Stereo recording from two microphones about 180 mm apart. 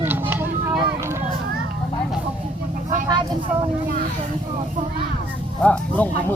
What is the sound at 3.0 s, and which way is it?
Speech, 25° right (ahead or behind).